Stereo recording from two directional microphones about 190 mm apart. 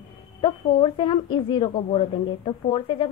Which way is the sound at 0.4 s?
25° left (ahead or behind).